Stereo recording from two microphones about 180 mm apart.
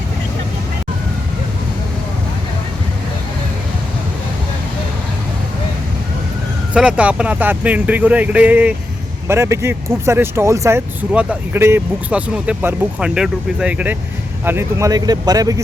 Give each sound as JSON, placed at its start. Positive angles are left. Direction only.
{"t": 6.7, "sound": "speech", "side_deg": -5}